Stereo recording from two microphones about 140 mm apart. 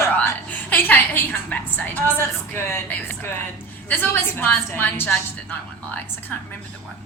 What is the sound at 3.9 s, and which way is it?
A woman's voice, 15° left (ahead or behind).